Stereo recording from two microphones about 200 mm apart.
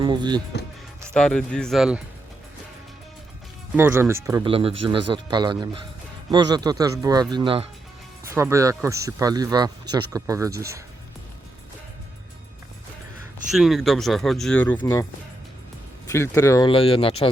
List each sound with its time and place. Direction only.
0.0 s speech: 20° right (ahead or behind)
1.1 s speech: 5° left (ahead or behind)
3.8 s speech: 10° right (ahead or behind)
4.4 s speech: 30° right (ahead or behind)
8.3 s speech: 15° right (ahead or behind)
13.5 s speech: centre (ahead or behind)
16.0 s speech: 15° left (ahead or behind)